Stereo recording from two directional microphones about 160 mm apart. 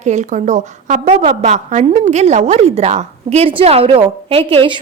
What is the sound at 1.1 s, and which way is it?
Speech, 35° right (ahead or behind).